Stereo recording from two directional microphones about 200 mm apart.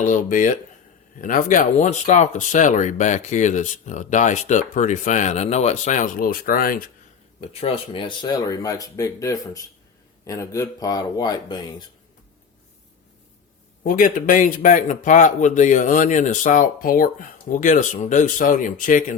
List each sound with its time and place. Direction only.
0.0 s speech: 40° left (ahead or behind)
7.6 s speech: 25° left (ahead or behind)
13.8 s speech: 45° left (ahead or behind)